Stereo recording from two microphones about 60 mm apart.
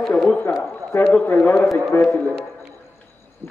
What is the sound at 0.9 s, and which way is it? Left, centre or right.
Speech, left.